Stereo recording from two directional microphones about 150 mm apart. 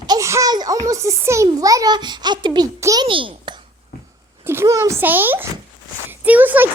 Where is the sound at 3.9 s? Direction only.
90° left.